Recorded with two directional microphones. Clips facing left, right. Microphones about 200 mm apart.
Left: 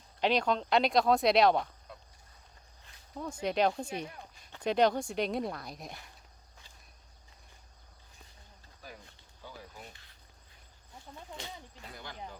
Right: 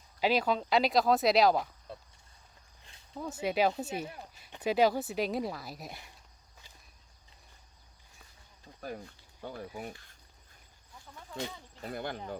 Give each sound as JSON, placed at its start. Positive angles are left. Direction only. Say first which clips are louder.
{"t": 0.2, "sound": "speech", "louder": "even", "side_deg": -5}
{"t": 3.2, "sound": "speech", "louder": "even", "side_deg": -5}
{"t": 9.4, "sound": "speech", "louder": "right 8 dB", "side_deg": -55}
{"t": 11.8, "sound": "speech", "louder": "right 10 dB", "side_deg": -55}